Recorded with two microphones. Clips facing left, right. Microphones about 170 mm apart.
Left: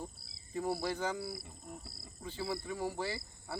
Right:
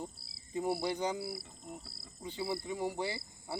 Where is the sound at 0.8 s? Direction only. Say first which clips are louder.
Right 2 dB; 15° right (ahead or behind).